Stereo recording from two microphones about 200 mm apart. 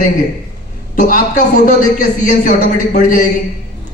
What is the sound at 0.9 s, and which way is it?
A man's voice, 40° left (ahead or behind).